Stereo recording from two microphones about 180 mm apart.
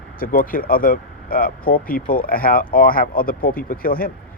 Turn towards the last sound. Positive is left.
turn(degrees=50)  # may be behind; listen again after turning